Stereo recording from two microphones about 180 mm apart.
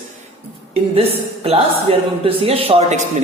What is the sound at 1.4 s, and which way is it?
A man's voice, 30° right (ahead or behind).